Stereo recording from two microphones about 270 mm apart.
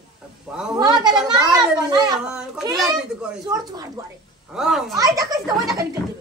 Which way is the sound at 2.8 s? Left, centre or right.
Centre.